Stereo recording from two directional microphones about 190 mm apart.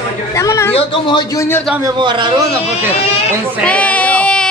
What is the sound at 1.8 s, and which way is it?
Speech, 25° right (ahead or behind).